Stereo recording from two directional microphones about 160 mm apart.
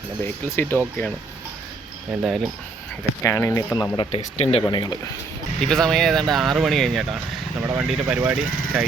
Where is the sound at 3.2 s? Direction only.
15° left (ahead or behind).